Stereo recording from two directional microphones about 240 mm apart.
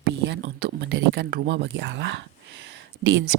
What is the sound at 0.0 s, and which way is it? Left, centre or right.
Speech, right.